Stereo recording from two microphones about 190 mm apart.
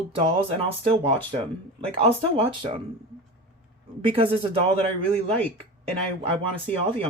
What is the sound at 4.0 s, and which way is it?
Speech, 30° right (ahead or behind).